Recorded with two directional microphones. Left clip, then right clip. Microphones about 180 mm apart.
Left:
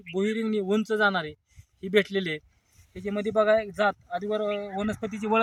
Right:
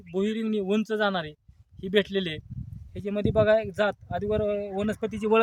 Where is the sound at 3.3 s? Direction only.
25° right (ahead or behind).